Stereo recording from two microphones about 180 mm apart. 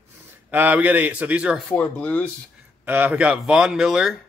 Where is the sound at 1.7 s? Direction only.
5° left (ahead or behind).